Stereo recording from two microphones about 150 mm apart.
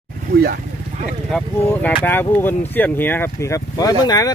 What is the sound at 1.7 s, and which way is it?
Speech, 10° left (ahead or behind).